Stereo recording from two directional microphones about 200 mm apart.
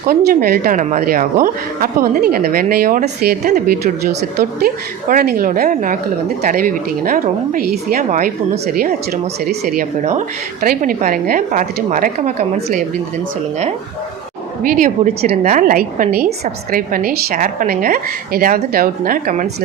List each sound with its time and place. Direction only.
0.3 s a woman's voice: 50° right (ahead or behind)
10.0 s a woman's voice: 35° right (ahead or behind)
14.6 s a woman's voice: 45° right (ahead or behind)